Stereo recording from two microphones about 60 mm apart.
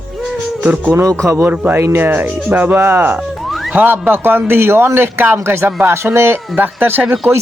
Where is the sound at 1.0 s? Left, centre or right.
Right.